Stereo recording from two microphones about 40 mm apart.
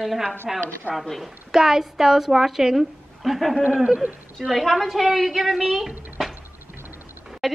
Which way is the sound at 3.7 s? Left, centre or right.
Centre.